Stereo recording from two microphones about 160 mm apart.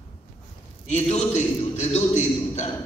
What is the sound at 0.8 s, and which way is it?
A man's voice, 45° left (ahead or behind).